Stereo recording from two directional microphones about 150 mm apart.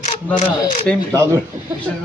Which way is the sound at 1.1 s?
20° right (ahead or behind).